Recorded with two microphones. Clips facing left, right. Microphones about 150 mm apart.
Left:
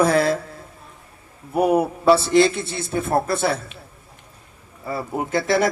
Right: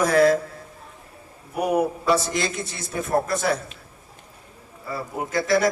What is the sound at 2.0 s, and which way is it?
A man's voice, 30° left (ahead or behind).